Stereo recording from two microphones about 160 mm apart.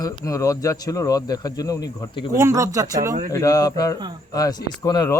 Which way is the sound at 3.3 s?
20° left (ahead or behind).